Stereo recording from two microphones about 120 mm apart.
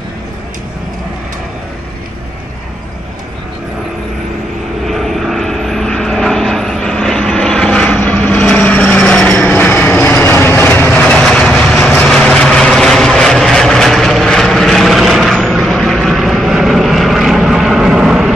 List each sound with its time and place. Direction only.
4.8 s vehicle: centre (ahead or behind)